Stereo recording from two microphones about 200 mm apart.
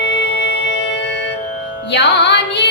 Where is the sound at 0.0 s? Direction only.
60° left (ahead or behind).